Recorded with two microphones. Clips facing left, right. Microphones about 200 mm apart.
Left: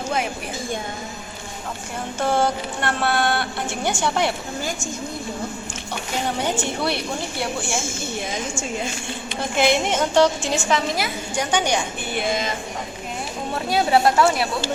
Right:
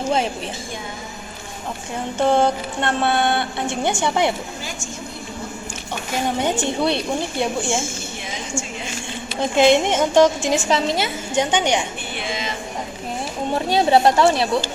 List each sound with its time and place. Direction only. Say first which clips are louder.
2.1 s a woman's voice: right 4 dB; 20° right (ahead or behind)
6.4 s a woman's voice: right 5 dB; 20° right (ahead or behind)
9.4 s a woman's voice: right 5 dB; 20° right (ahead or behind)
10.7 s a woman's voice: right 2 dB; 30° right (ahead or behind)
12.1 s speech: left 5 dB; 45° left (ahead or behind)
13.5 s a woman's voice: right 3 dB; 25° right (ahead or behind)